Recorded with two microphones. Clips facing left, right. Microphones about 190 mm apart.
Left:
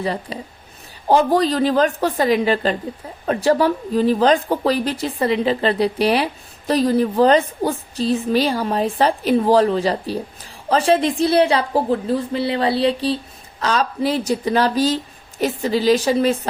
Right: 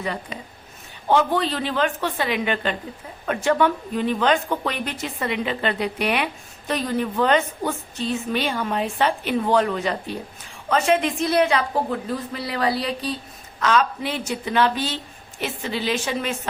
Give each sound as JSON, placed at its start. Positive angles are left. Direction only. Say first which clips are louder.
{"t": 0.0, "sound": "speech", "louder": "left 5 dB", "side_deg": 35}